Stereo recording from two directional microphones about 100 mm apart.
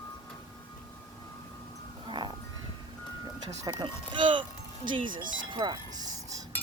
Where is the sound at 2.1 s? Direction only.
50° right (ahead or behind).